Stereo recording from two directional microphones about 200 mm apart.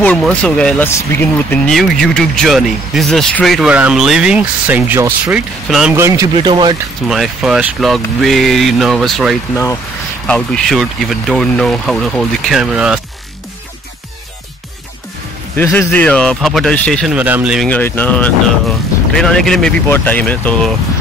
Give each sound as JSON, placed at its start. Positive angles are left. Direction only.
{"t": 0.0, "sound": "speech", "side_deg": 5}
{"t": 7.1, "sound": "speech", "side_deg": -5}
{"t": 15.5, "sound": "speech", "side_deg": 10}
{"t": 17.6, "sound": "speech", "side_deg": 10}